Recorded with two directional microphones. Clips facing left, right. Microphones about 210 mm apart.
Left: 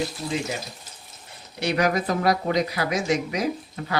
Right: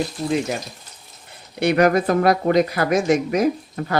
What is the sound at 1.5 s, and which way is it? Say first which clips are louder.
Speech: right 7 dB; 55° right (ahead or behind).